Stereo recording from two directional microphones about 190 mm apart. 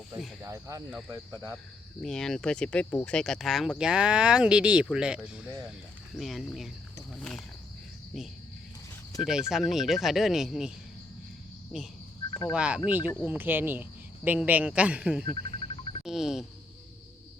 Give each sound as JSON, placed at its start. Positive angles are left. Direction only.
{"t": 0.4, "sound": "a man's voice", "side_deg": -15}
{"t": 0.9, "sound": "speech", "side_deg": 0}
{"t": 9.2, "sound": "speech", "side_deg": -5}
{"t": 11.7, "sound": "speech", "side_deg": 0}
{"t": 12.3, "sound": "speech", "side_deg": 20}
{"t": 12.5, "sound": "a man's voice", "side_deg": -5}
{"t": 15.3, "sound": "music", "side_deg": 30}
{"t": 16.0, "sound": "speech", "side_deg": 0}